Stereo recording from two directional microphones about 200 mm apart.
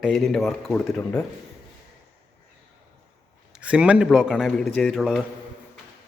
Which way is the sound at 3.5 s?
5° right (ahead or behind).